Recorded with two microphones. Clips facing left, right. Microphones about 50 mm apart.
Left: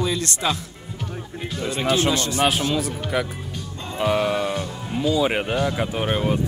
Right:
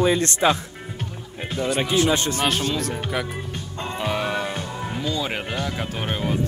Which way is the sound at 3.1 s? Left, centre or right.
Centre.